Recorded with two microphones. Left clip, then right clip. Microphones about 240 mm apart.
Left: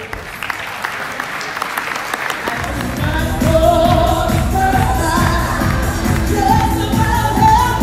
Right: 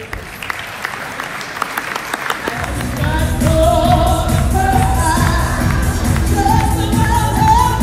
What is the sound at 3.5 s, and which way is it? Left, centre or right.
Music, right.